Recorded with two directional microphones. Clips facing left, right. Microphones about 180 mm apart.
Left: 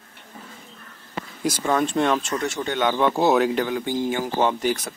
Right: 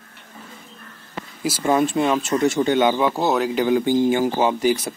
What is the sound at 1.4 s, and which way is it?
Speech, 5° right (ahead or behind).